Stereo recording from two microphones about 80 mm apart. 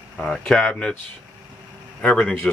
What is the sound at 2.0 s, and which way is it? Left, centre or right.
Speech, centre.